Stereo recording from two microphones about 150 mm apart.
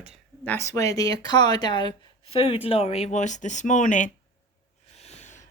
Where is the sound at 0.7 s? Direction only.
25° left (ahead or behind); by 4.1 s 55° left (ahead or behind).